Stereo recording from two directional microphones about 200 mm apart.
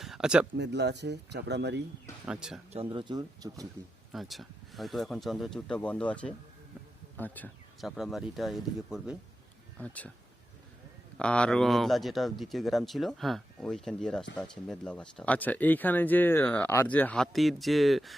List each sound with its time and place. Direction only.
0.0 s a sound: centre (ahead or behind)
0.5 s speech: 60° right (ahead or behind)
2.2 s speech: 5° right (ahead or behind)
2.7 s speech: 25° right (ahead or behind)
4.1 s speech: centre (ahead or behind)
11.2 s speech: 5° left (ahead or behind)